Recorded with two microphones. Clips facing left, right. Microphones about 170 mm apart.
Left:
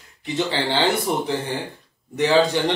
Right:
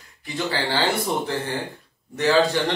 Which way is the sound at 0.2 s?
20° left (ahead or behind).